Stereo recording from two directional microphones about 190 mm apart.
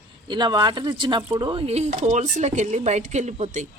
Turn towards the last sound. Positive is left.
turn(degrees=-40)  # may be behind; listen again after turning